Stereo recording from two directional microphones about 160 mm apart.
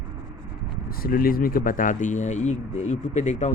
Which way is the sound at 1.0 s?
65° left (ahead or behind).